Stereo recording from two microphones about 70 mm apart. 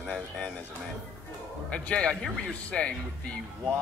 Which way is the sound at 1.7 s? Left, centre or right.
Centre.